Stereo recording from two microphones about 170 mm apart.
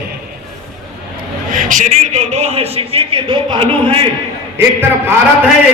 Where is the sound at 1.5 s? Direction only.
50° right (ahead or behind); by 4.1 s 30° right (ahead or behind).